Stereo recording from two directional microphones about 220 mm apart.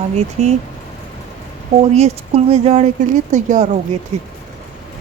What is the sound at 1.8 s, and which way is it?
Speech, 30° right (ahead or behind).